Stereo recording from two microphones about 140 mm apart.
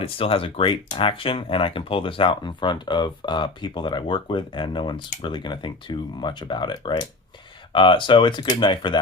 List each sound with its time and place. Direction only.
0.0 s speech: 40° left (ahead or behind)